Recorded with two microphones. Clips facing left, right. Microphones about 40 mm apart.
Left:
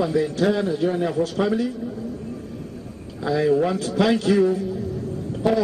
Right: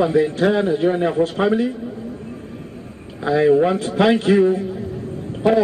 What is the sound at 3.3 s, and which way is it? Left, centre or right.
Speech, right.